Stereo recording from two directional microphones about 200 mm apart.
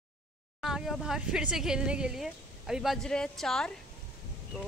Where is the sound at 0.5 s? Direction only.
Centre (ahead or behind).